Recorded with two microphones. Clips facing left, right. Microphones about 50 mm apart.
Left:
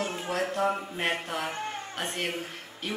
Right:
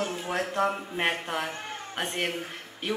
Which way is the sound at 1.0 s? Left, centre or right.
Right.